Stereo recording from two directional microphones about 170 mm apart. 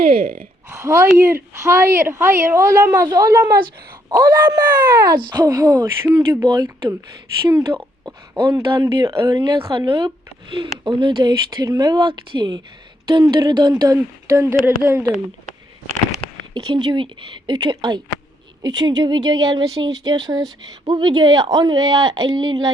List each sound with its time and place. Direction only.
0.0 s speech: 55° right (ahead or behind)
0.7 s speech: 15° right (ahead or behind)
7.7 s a sound: 10° right (ahead or behind)
8.4 s speech: 25° right (ahead or behind)
16.6 s speech: 25° right (ahead or behind)